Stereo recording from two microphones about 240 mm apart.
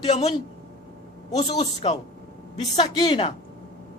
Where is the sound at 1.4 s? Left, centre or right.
Left.